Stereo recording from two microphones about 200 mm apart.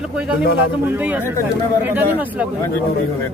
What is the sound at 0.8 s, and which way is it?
Speech, 10° right (ahead or behind).